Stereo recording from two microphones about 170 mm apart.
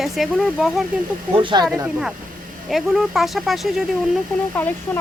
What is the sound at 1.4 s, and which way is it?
Speech, 30° right (ahead or behind).